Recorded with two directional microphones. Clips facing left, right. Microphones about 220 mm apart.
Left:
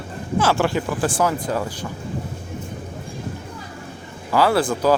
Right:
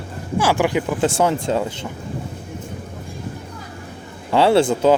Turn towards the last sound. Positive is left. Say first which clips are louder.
# right 4 dB
turn(degrees=-20)  # may be behind; listen again after turning